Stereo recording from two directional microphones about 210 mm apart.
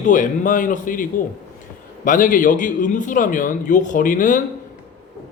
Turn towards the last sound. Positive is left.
turn(degrees=40)  # may be behind; listen again after turning